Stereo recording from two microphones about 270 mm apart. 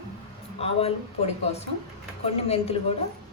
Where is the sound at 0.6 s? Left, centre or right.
Left.